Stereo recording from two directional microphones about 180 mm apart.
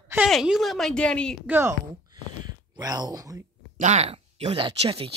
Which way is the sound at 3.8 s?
40° right (ahead or behind).